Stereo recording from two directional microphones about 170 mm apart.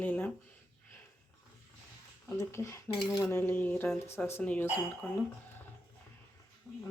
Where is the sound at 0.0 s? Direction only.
10° left (ahead or behind).